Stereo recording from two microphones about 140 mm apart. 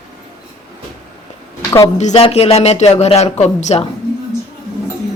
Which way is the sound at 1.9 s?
55° left (ahead or behind).